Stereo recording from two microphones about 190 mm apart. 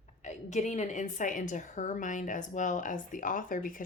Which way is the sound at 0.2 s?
40° left (ahead or behind).